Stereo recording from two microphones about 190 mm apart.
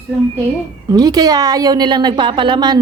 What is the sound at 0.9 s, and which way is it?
A woman's voice, 20° right (ahead or behind).